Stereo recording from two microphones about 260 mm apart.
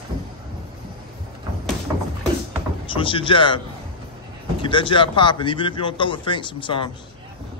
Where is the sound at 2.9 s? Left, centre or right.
Centre.